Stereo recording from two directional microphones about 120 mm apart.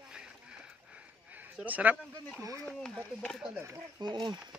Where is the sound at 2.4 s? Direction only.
25° right (ahead or behind).